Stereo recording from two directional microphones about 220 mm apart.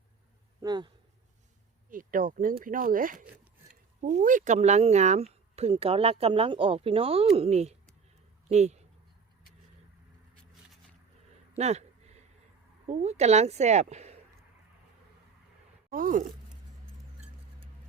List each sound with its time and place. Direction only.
0.6 s speech: 20° right (ahead or behind)
1.9 s speech: 40° right (ahead or behind)
11.5 s a sound: 30° right (ahead or behind)
12.9 s speech: 30° right (ahead or behind)
15.9 s speech: 40° right (ahead or behind)